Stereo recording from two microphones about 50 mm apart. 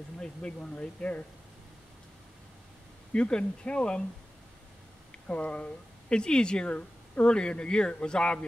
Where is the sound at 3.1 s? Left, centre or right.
Centre.